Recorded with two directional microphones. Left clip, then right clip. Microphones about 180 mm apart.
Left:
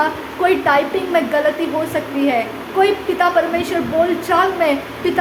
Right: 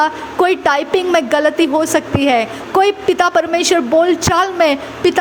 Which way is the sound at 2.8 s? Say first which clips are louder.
Right 1 dB; 60° right (ahead or behind).